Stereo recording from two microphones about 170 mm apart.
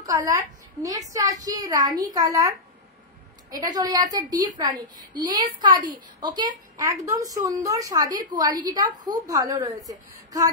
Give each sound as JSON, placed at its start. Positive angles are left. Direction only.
{"t": 0.0, "sound": "a woman's voice", "side_deg": -20}